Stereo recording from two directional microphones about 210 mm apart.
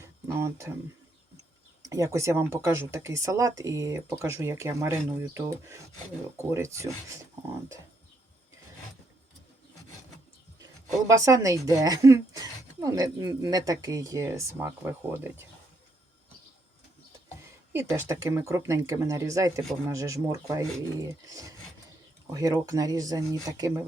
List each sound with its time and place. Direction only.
0.0 s a sound: 10° right (ahead or behind)
1.8 s a woman's voice: 15° right (ahead or behind)
11.2 s a woman's voice: 15° right (ahead or behind)
17.7 s a woman's voice: 10° right (ahead or behind)